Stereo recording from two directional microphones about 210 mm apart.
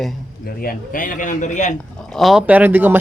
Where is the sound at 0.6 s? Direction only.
40° left (ahead or behind).